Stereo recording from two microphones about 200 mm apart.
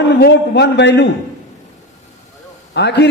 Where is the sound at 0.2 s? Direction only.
60° left (ahead or behind).